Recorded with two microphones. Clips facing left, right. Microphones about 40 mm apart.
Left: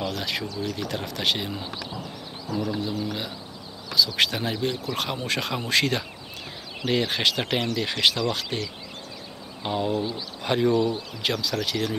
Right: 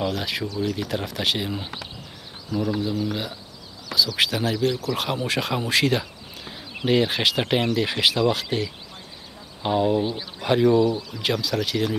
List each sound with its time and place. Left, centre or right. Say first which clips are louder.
0.0 s speech: right 3 dB; centre
4.5 s speech: right 4 dB; centre
4.9 s speech: right 3 dB; centre
9.9 s speech: right 4 dB; right
10.4 s speech: right 4 dB; centre